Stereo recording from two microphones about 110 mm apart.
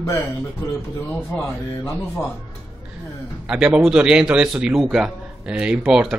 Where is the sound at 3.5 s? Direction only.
10° right (ahead or behind).